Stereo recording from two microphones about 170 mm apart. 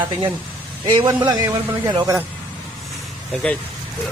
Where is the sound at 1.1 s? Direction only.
10° right (ahead or behind).